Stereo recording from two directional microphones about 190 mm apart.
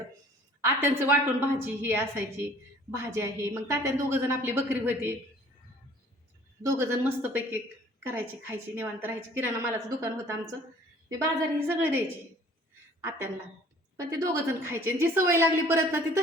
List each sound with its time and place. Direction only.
0.6 s a woman's voice: 15° right (ahead or behind)
6.6 s a woman's voice: 15° right (ahead or behind)
13.0 s a woman's voice: 15° right (ahead or behind)